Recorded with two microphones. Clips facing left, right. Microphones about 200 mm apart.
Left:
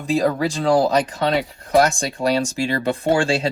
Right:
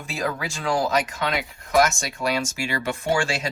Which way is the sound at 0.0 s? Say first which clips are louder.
Left 9 dB; 35° left (ahead or behind).